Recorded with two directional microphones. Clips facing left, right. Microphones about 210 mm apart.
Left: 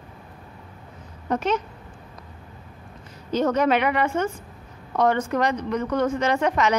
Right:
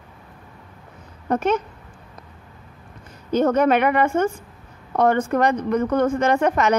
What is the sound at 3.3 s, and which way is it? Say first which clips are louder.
A woman's voice: right 3 dB; 55° right (ahead or behind).